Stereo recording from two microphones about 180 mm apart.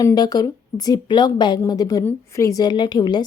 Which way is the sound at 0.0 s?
20° left (ahead or behind).